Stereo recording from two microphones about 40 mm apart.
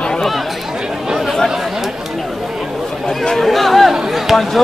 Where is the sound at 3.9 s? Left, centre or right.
Centre.